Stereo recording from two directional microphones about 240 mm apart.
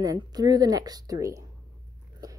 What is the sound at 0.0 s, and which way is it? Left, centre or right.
A woman's voice, centre.